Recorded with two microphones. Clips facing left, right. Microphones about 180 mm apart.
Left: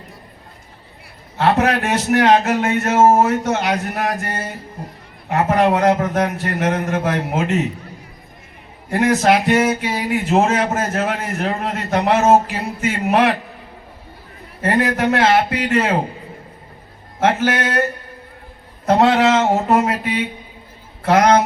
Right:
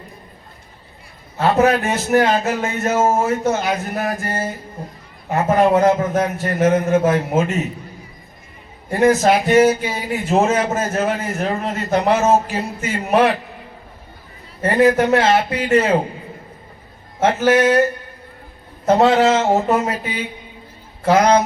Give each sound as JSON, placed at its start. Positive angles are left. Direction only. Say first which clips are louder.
{"t": 1.4, "sound": "a man's voice", "louder": "right 1 dB", "side_deg": 65}
{"t": 8.9, "sound": "a man's voice", "louder": "right 1 dB", "side_deg": 65}
{"t": 14.6, "sound": "a man's voice", "louder": "right 3 dB", "side_deg": 60}
{"t": 17.2, "sound": "a man's voice", "louder": "right 3 dB", "side_deg": 55}
{"t": 18.9, "sound": "a man's voice", "louder": "even", "side_deg": 55}